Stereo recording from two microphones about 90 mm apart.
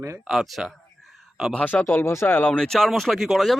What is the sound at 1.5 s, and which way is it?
Speech, 20° left (ahead or behind).